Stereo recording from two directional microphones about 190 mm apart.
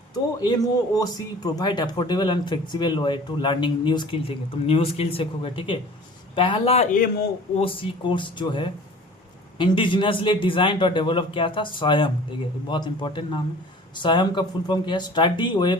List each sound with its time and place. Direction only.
0.1 s speech: 20° left (ahead or behind)
6.9 s a man's voice: 50° left (ahead or behind)
7.5 s speech: 30° left (ahead or behind)